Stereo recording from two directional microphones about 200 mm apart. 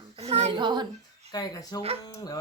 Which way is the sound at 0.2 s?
30° right (ahead or behind).